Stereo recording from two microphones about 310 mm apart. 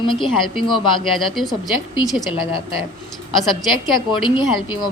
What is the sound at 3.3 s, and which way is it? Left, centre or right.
Speech, centre.